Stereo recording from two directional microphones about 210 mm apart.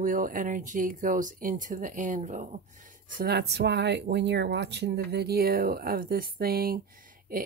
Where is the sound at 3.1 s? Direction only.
50° right (ahead or behind).